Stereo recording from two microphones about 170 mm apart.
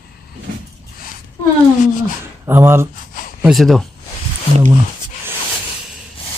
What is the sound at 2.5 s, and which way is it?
Stir, 15° right (ahead or behind).